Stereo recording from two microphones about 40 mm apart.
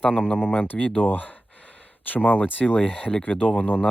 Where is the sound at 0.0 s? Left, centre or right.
Left.